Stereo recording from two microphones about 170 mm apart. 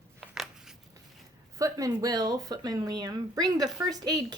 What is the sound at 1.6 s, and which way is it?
Speech, 20° right (ahead or behind).